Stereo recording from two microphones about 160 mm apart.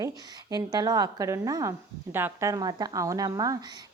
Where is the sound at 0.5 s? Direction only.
25° right (ahead or behind).